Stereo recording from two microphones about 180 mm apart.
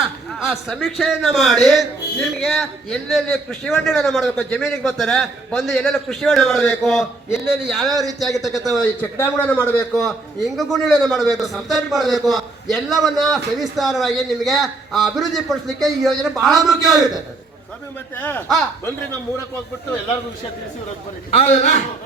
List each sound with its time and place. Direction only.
0.3 s speech: centre (ahead or behind)
9.1 s a man's voice: 15° left (ahead or behind)
18.2 s a man's voice: 10° left (ahead or behind)
21.3 s a man's voice: 40° left (ahead or behind)